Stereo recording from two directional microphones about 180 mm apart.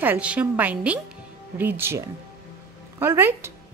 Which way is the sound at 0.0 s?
10° right (ahead or behind).